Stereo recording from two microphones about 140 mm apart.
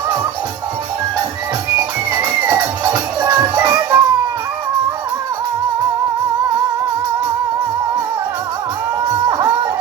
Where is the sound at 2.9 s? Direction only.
30° right (ahead or behind).